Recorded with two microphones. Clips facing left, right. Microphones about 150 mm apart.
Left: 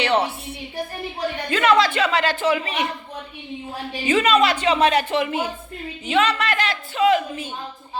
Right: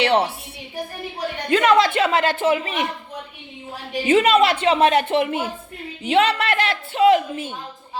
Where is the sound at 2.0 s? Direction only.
50° right (ahead or behind).